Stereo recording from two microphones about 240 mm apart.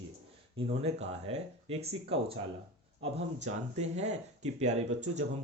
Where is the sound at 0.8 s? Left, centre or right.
Right.